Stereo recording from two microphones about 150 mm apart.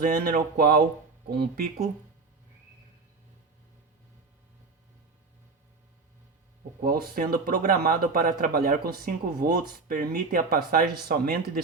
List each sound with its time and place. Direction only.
0.0 s speech: 75° right (ahead or behind)
1.3 s speech: 90° right
6.8 s speech: 75° right (ahead or behind)